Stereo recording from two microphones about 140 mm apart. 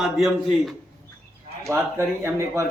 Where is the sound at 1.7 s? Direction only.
20° right (ahead or behind).